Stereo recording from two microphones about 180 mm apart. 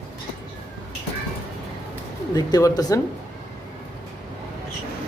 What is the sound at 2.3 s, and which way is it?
Speech, 20° left (ahead or behind).